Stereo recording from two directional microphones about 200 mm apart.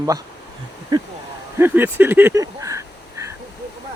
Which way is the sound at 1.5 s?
10° right (ahead or behind).